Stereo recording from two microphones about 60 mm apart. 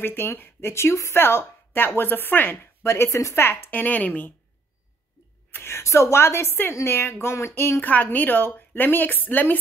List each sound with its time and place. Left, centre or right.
0.0 s a woman's voice: left
2.8 s speech: left
3.7 s speech: left
5.5 s speech: left
7.8 s a woman's voice: left